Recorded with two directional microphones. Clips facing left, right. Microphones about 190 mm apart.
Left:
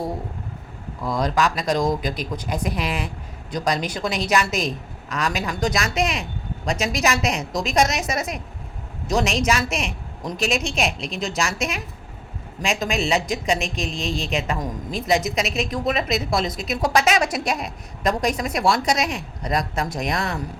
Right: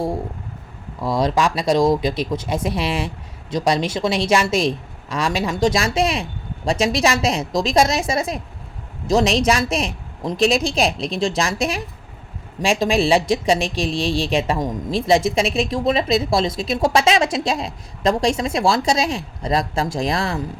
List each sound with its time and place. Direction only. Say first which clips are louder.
1.2 s a woman's voice: right 3 dB; 30° right (ahead or behind)